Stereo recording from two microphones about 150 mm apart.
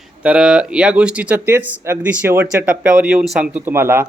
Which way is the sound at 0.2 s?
5° right (ahead or behind).